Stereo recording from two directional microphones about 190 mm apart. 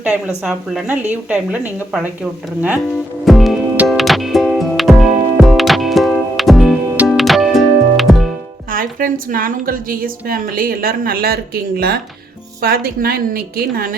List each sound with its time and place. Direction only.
0.0 s a woman's voice: 5° right (ahead or behind)
2.9 s music: centre (ahead or behind)
8.7 s a woman's voice: 45° right (ahead or behind)